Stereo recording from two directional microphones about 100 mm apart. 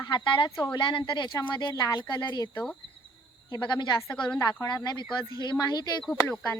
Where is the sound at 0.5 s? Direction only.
45° left (ahead or behind).